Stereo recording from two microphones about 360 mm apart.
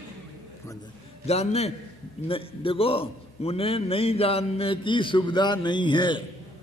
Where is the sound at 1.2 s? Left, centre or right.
Centre.